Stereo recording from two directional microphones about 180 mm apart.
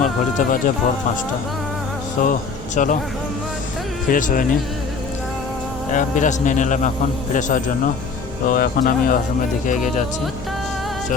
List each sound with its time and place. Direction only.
0.0 s a man's voice: 45° left (ahead or behind)
2.2 s a man's voice: 50° left (ahead or behind)
4.1 s a man's voice: 50° left (ahead or behind)
5.9 s a man's voice: 45° left (ahead or behind)